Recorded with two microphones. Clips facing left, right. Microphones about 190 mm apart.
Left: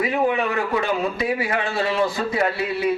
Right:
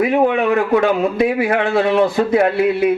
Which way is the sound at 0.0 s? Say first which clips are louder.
Right 6 dB; 55° right (ahead or behind).